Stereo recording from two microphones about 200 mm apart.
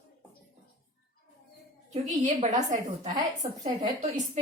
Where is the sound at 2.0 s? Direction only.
35° right (ahead or behind).